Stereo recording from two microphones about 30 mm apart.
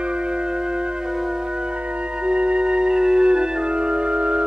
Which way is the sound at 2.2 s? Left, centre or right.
Right.